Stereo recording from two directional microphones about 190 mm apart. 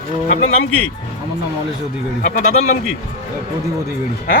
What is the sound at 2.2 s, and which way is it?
Speech, 40° left (ahead or behind).